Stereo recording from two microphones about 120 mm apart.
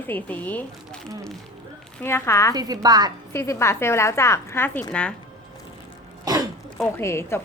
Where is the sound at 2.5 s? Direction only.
35° right (ahead or behind).